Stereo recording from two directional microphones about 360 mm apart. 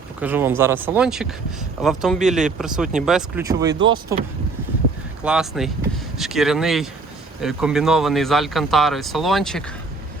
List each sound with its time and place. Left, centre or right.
0.2 s speech: centre
3.8 s speech: right
5.2 s speech: centre